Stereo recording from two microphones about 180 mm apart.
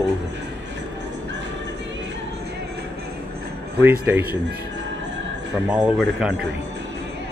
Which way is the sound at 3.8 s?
10° right (ahead or behind).